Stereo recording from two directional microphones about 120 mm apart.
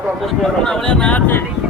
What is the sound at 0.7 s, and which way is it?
Speech, 5° left (ahead or behind).